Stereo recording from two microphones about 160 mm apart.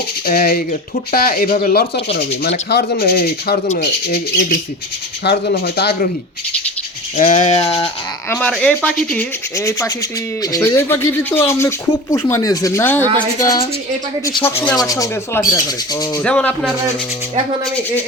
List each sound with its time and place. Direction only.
0.3 s speech: 70° left (ahead or behind)
2.6 s speech: 90° left
3.8 s speech: 60° left (ahead or behind)
5.2 s speech: 90° left
7.2 s a sound: 50° left (ahead or behind)
8.4 s speech: 5° left (ahead or behind)
9.1 s speech: 20° left (ahead or behind)
14.4 s speech: 10° left (ahead or behind)
14.8 s speech: 20° left (ahead or behind)
16.2 s speech: 5° left (ahead or behind)